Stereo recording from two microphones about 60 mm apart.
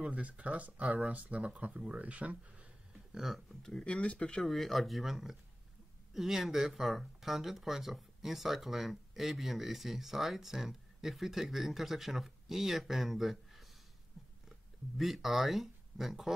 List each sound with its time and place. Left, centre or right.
0.0 s speech: right
3.1 s speech: centre
3.6 s speech: centre
4.4 s speech: centre
15.0 s speech: centre